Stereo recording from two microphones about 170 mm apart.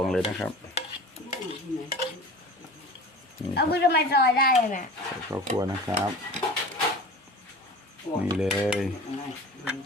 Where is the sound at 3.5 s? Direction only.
75° left (ahead or behind).